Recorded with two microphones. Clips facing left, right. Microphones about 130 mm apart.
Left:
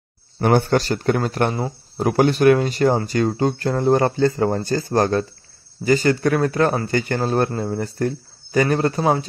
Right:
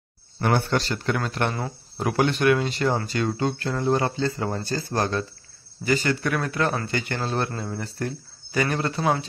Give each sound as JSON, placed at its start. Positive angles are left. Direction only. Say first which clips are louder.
{"t": 0.4, "sound": "speech", "louder": "left 6 dB", "side_deg": 45}